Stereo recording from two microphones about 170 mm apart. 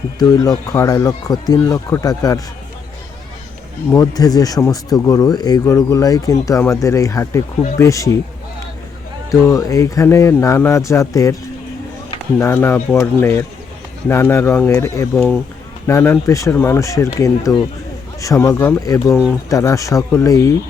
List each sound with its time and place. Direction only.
0.2 s speech: 20° left (ahead or behind)
3.9 s speech: 20° left (ahead or behind)
9.3 s speech: 20° left (ahead or behind)
12.4 s speech: 15° left (ahead or behind)